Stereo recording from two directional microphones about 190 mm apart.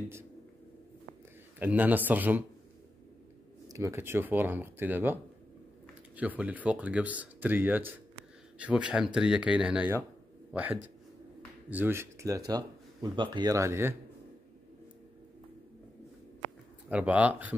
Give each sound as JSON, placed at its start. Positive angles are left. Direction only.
{"t": 1.6, "sound": "speech", "side_deg": -10}
{"t": 3.6, "sound": "speech", "side_deg": -15}
{"t": 16.9, "sound": "speech", "side_deg": -5}